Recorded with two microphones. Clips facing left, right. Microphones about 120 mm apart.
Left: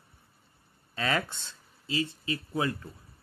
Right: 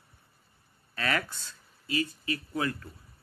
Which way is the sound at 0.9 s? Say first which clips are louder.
Left 1 dB; 25° left (ahead or behind).